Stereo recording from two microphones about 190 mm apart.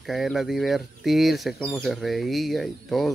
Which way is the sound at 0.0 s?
Centre (ahead or behind).